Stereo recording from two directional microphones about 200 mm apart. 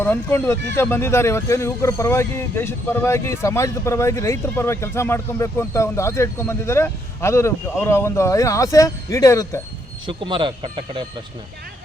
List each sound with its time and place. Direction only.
0.0 s speech: 10° left (ahead or behind)
10.1 s speech: 25° right (ahead or behind)